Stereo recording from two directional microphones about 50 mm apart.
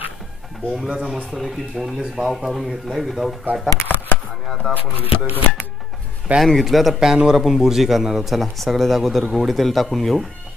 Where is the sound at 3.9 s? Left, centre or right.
Left.